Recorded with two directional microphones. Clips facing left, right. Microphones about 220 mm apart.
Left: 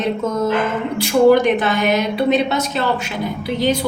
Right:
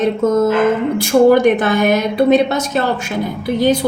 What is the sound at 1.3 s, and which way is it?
A woman's voice, 50° right (ahead or behind).